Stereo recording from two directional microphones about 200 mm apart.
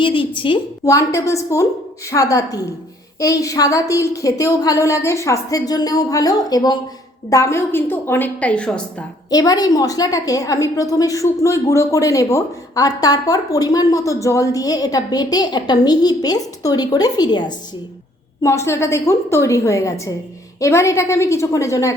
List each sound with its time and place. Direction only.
0.0 s a woman's voice: 25° left (ahead or behind); by 9.0 s 5° left (ahead or behind)
9.3 s a woman's voice: 20° left (ahead or behind)